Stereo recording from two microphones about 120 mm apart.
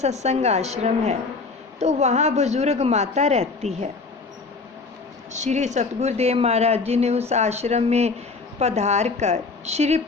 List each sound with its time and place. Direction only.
0.0 s speech: 70° right (ahead or behind)
5.3 s speech: 80° right; by 10.0 s 65° right (ahead or behind)